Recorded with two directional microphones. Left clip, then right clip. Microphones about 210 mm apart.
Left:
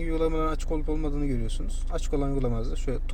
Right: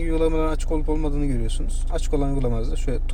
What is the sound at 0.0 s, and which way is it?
Speech, 15° left (ahead or behind).